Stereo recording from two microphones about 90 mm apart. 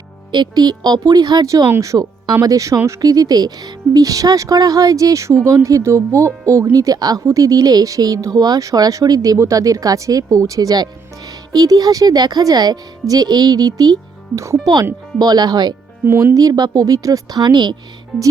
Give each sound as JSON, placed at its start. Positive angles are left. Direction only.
{"t": 0.3, "sound": "speech", "side_deg": -55}
{"t": 1.6, "sound": "speech", "side_deg": -30}
{"t": 3.0, "sound": "speech", "side_deg": -45}
{"t": 15.2, "sound": "speech", "side_deg": -45}
{"t": 16.0, "sound": "speech", "side_deg": -30}